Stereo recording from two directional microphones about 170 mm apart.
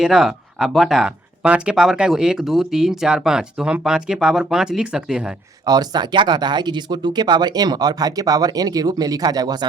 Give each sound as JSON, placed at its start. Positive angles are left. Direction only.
{"t": 0.0, "sound": "speech", "side_deg": -5}
{"t": 5.6, "sound": "speech", "side_deg": -25}